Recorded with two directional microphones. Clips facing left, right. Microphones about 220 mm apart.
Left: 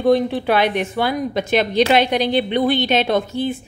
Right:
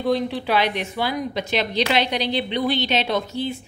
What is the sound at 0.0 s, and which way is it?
Speech, 50° left (ahead or behind).